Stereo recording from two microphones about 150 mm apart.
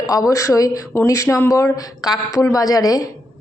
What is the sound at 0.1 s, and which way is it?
Speech, 25° left (ahead or behind).